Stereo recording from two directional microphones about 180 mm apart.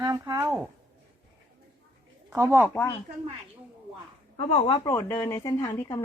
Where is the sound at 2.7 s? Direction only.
15° left (ahead or behind).